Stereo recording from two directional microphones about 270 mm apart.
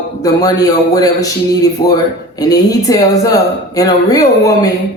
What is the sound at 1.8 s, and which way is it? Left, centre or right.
Speech, left.